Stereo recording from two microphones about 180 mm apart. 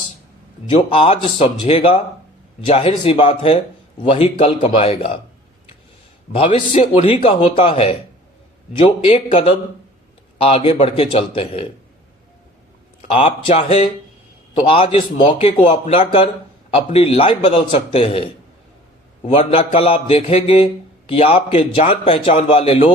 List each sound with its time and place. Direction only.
0.8 s speech: 30° left (ahead or behind)
6.3 s speech: 35° left (ahead or behind)
13.1 s a man's voice: 30° left (ahead or behind)